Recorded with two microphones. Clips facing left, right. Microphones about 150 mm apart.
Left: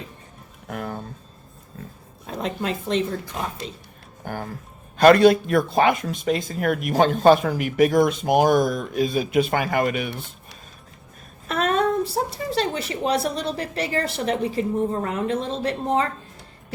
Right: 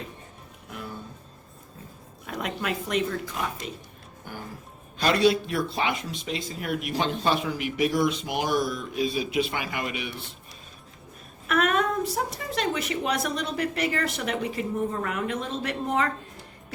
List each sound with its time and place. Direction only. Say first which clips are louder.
0.7 s music: left 8 dB; 55° left (ahead or behind)
2.2 s speech: left 4 dB; 25° left (ahead or behind)
4.2 s speech: left 8 dB; 50° left (ahead or behind)
11.4 s speech: left 3 dB; 30° left (ahead or behind)